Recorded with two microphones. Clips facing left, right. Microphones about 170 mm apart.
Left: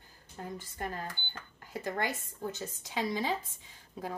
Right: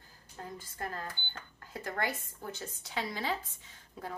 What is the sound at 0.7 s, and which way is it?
A woman's voice, 20° left (ahead or behind).